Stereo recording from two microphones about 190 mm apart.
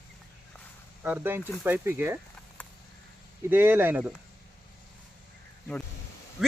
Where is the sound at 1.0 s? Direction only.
10° right (ahead or behind).